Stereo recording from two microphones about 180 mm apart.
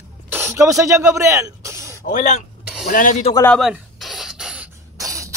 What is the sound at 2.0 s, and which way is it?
Speech, 45° left (ahead or behind).